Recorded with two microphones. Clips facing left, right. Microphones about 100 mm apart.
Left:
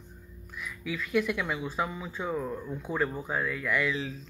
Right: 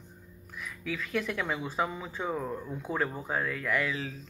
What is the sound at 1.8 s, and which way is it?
Speech, 25° right (ahead or behind).